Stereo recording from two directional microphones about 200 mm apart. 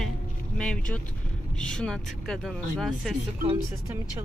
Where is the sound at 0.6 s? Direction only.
5° left (ahead or behind).